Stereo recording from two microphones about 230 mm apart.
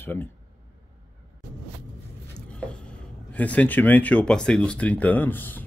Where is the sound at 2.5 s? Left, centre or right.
Centre.